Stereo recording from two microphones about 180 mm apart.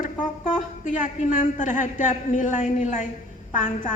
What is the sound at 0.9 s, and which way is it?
A man's voice, 45° left (ahead or behind).